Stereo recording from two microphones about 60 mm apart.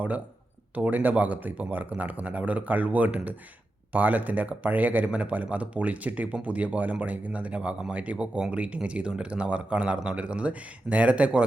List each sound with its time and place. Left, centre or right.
0.8 s speech: right